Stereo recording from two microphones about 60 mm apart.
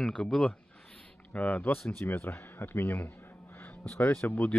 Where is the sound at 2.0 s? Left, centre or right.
Left.